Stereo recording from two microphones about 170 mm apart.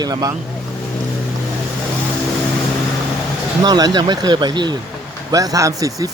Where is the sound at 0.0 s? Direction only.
25° right (ahead or behind).